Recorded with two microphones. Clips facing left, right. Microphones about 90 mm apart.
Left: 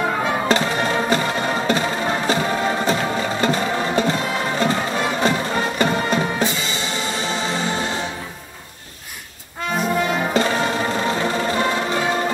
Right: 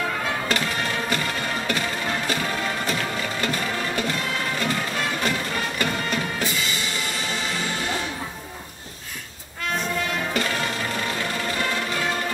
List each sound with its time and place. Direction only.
0.0 s music: 25° left (ahead or behind)
10.0 s music: 25° left (ahead or behind)